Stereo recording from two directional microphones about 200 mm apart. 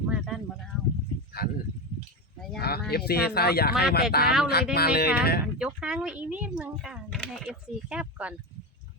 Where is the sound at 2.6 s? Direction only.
50° left (ahead or behind).